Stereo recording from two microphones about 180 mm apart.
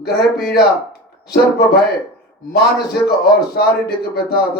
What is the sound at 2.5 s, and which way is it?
A man's voice, 65° left (ahead or behind).